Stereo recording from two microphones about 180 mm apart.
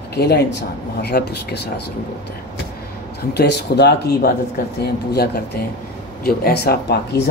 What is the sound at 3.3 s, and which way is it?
Speech, 65° left (ahead or behind).